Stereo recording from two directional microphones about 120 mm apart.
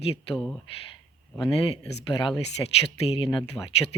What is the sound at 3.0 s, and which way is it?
Speech, 50° left (ahead or behind).